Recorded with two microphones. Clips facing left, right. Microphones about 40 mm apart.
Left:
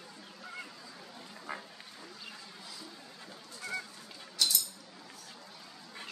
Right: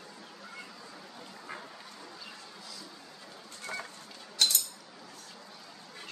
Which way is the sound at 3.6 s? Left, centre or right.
Right.